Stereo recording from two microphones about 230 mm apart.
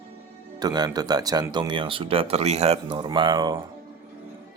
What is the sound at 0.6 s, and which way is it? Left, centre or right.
Speech, centre.